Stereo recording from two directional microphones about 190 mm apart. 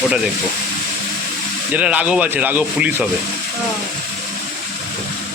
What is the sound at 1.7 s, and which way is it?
Speech, 5° right (ahead or behind).